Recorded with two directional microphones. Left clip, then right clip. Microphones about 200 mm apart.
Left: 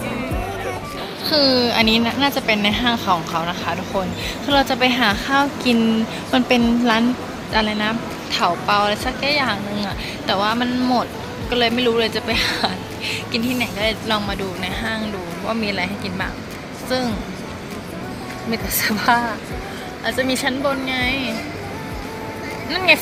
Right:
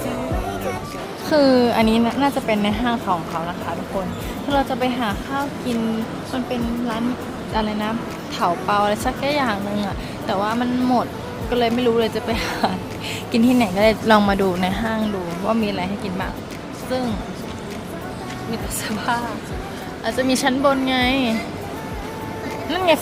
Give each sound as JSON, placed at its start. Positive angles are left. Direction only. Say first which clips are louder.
{"t": 1.3, "sound": "a woman's voice", "louder": "right 1 dB", "side_deg": -20}
{"t": 7.5, "sound": "a woman's voice", "louder": "left 4 dB", "side_deg": -5}
{"t": 13.3, "sound": "speech", "louder": "right 7 dB", "side_deg": -30}
{"t": 15.4, "sound": "a woman's voice", "louder": "even", "side_deg": -20}
{"t": 18.5, "sound": "a woman's voice", "louder": "left 7 dB", "side_deg": 15}
{"t": 20.1, "sound": "a woman's voice", "louder": "right 1 dB", "side_deg": -20}